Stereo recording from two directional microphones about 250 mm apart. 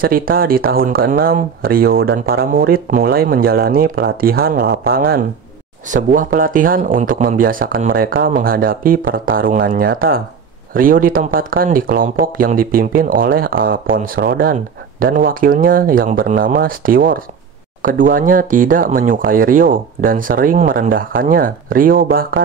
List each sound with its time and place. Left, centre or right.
0.0 s speech: right